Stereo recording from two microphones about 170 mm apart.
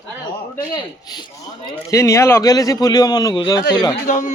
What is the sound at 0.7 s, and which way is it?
A man's voice, 25° left (ahead or behind).